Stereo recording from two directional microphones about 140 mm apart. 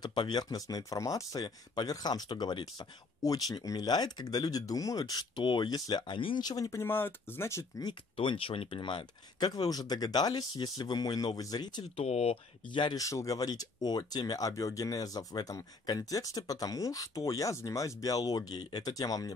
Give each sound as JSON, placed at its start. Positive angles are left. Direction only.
{"t": 0.0, "sound": "speech", "side_deg": 30}
{"t": 7.8, "sound": "speech", "side_deg": 35}
{"t": 12.0, "sound": "speech", "side_deg": 50}
{"t": 12.6, "sound": "speech", "side_deg": 35}